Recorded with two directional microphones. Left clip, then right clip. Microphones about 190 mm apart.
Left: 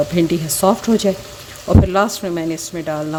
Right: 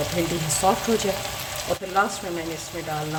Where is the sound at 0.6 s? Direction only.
45° left (ahead or behind).